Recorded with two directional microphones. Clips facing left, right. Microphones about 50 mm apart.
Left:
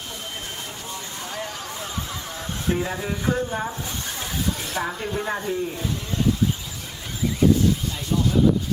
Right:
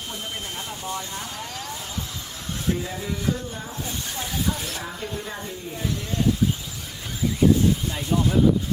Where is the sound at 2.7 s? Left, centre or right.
Left.